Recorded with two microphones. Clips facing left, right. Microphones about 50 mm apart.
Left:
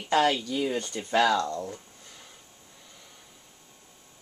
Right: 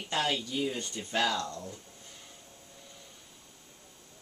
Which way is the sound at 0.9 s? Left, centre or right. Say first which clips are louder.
Left 8 dB; left.